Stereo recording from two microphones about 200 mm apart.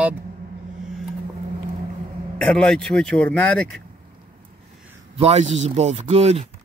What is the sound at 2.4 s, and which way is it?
Speech, 5° left (ahead or behind).